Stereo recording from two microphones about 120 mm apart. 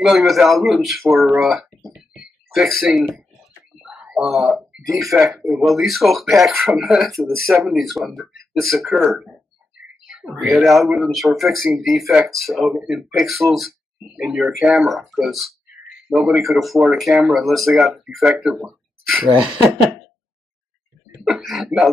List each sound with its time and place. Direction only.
0.0 s speech: centre (ahead or behind)
2.0 s a sound: 5° right (ahead or behind)
3.2 s speech: 5° right (ahead or behind)
21.2 s speech: 5° right (ahead or behind)